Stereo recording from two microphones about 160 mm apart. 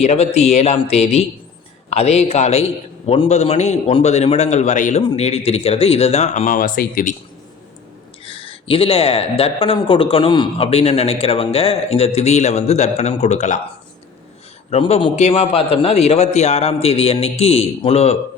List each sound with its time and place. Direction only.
0.0 s a man's voice: 40° left (ahead or behind)
5.0 s speech: 40° left (ahead or behind); by 7.2 s 55° left (ahead or behind)
8.2 s speech: 35° left (ahead or behind)
14.7 s speech: 40° left (ahead or behind)